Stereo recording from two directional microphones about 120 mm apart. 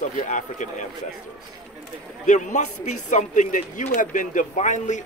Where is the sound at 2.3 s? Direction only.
90° left.